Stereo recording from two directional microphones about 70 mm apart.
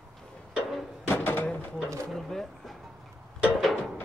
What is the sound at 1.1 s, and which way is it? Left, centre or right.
Door, left.